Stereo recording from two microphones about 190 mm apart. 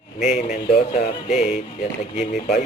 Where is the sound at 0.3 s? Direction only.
40° left (ahead or behind).